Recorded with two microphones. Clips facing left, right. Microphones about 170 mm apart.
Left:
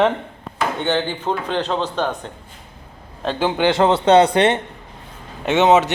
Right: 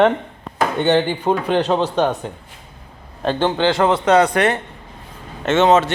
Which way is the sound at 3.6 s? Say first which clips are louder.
Left 3 dB; 25° left (ahead or behind).